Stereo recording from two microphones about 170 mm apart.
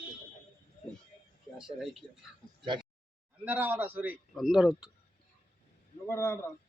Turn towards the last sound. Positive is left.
turn(degrees=15)  # may be behind; listen again after turning